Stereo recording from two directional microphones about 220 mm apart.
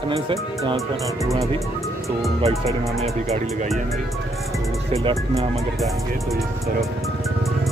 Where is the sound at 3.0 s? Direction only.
30° right (ahead or behind).